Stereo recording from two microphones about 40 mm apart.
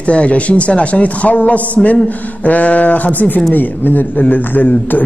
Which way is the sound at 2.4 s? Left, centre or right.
Left.